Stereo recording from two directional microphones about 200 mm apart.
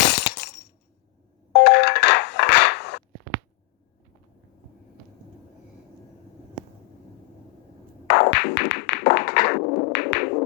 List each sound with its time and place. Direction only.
0.0 s breaking: 55° left (ahead or behind)
1.5 s ding: 60° left (ahead or behind)
8.0 s tap: 55° left (ahead or behind)